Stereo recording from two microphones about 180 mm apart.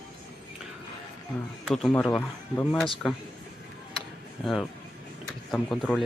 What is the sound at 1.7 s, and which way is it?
A man's voice, centre (ahead or behind).